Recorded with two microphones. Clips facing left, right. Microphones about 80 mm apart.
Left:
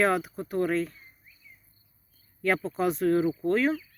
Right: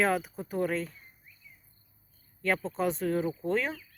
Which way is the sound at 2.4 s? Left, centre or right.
Centre.